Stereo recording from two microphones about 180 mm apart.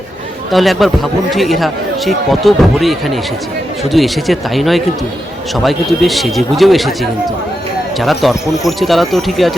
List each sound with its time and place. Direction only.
0.5 s speech: centre (ahead or behind)